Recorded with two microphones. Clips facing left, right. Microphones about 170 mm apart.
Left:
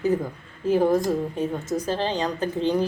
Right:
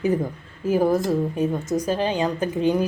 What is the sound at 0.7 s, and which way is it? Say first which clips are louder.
A woman's voice: even; 5° right (ahead or behind).